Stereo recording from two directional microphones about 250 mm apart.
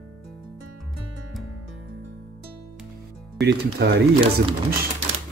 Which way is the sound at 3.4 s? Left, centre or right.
Right.